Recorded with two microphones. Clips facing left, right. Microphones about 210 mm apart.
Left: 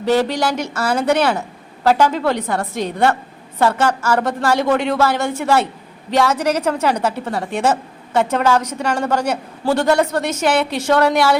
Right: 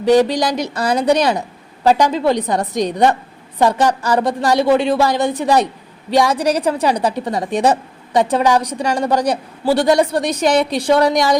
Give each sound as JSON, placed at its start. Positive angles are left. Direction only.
{"t": 0.0, "sound": "a woman's voice", "side_deg": -15}